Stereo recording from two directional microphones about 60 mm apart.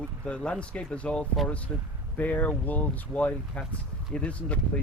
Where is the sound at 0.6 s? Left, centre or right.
Centre.